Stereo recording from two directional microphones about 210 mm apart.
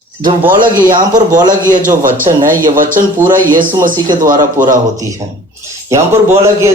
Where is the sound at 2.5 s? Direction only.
40° right (ahead or behind).